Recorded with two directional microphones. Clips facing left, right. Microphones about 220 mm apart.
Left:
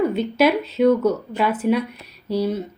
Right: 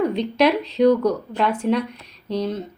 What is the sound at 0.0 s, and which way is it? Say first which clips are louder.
A woman's voice: left 1 dB; 5° left (ahead or behind).